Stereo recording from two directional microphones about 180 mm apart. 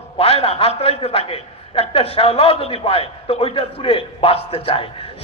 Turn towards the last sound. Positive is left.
turn(degrees=30)  # may be behind; listen again after turning